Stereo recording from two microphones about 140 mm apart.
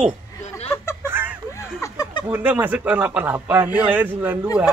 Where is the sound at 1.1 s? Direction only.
15° right (ahead or behind).